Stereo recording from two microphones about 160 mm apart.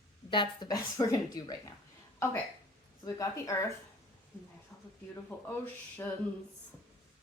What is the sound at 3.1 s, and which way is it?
Speech, 20° left (ahead or behind).